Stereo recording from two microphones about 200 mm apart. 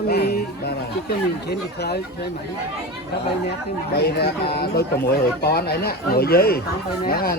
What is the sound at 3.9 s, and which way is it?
Speech, 55° left (ahead or behind).